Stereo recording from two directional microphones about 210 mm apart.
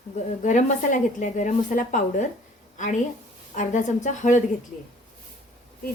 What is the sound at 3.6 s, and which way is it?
Speech, 35° left (ahead or behind).